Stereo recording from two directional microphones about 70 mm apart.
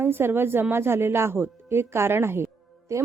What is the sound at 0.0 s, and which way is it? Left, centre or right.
A woman's voice, right.